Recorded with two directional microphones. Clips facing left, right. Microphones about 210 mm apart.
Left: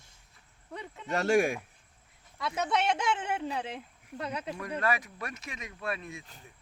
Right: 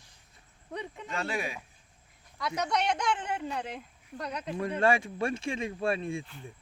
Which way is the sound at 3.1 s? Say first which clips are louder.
Left 1 dB; 25° left (ahead or behind).